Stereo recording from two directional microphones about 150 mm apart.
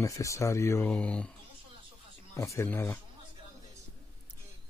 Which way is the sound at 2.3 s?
20° left (ahead or behind).